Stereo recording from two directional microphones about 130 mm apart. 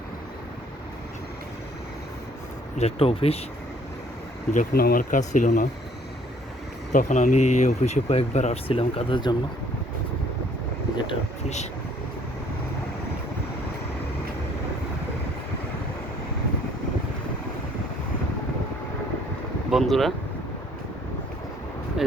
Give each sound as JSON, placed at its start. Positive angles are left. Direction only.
{"t": 2.7, "sound": "speech", "side_deg": 50}
{"t": 4.5, "sound": "speech", "side_deg": 75}
{"t": 6.9, "sound": "speech", "side_deg": 65}
{"t": 10.9, "sound": "speech", "side_deg": 40}
{"t": 11.4, "sound": "speech", "side_deg": 60}
{"t": 19.7, "sound": "speech", "side_deg": 0}
{"t": 22.0, "sound": "a sound", "side_deg": -5}